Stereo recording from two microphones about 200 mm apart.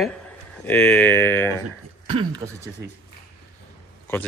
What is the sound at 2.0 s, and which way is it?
Speech, 25° right (ahead or behind).